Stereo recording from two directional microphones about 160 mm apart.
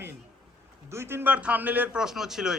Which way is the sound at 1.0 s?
15° right (ahead or behind).